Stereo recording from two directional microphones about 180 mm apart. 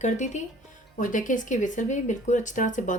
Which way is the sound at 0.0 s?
40° left (ahead or behind).